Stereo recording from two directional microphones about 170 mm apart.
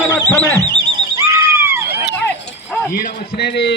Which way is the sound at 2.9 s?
55° left (ahead or behind).